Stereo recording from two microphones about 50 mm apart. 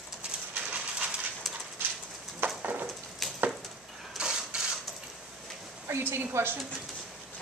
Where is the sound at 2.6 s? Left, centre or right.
Right.